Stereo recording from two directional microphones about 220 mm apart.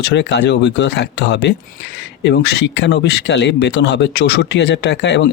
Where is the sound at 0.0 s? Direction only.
50° left (ahead or behind).